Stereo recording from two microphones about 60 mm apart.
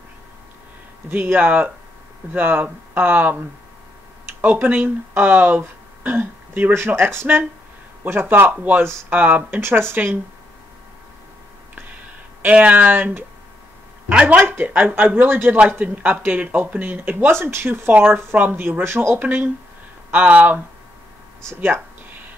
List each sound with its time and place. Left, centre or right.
1.1 s speech: right
9.6 s speech: right
12.4 s speech: right
14.5 s speech: right
18.6 s speech: right
19.1 s speech: right